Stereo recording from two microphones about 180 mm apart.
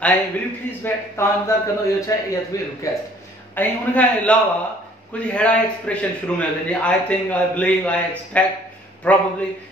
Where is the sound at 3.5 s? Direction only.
10° left (ahead or behind).